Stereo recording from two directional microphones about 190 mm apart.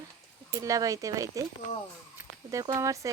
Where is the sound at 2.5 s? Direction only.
15° right (ahead or behind).